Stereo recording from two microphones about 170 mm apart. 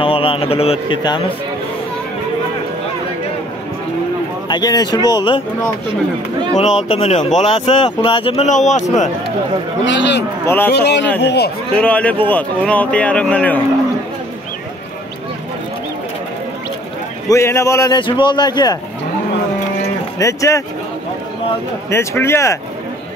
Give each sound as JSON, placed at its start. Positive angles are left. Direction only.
{"t": 0.0, "sound": "speech", "side_deg": 30}
{"t": 4.5, "sound": "a man's voice", "side_deg": 25}
{"t": 6.9, "sound": "speech", "side_deg": 40}
{"t": 9.8, "sound": "a man's voice", "side_deg": 90}
{"t": 10.4, "sound": "a man's voice", "side_deg": 10}
{"t": 10.7, "sound": "speech", "side_deg": 85}
{"t": 11.2, "sound": "a man's voice", "side_deg": 75}
{"t": 11.7, "sound": "a man's voice", "side_deg": 10}
{"t": 17.3, "sound": "a man's voice", "side_deg": 15}
{"t": 20.2, "sound": "a man's voice", "side_deg": 20}
{"t": 21.9, "sound": "a man's voice", "side_deg": 15}